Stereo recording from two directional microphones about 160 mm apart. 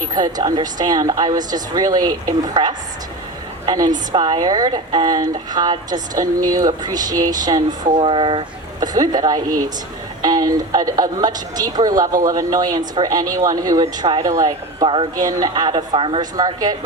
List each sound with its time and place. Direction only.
0.1 s a woman's voice: 25° right (ahead or behind)